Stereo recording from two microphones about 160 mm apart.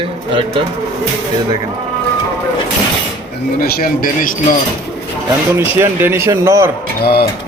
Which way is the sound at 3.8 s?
60° left (ahead or behind).